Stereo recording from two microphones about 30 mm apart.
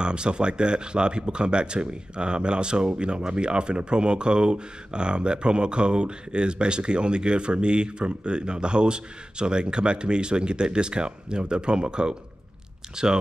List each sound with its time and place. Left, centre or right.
0.0 s speech: right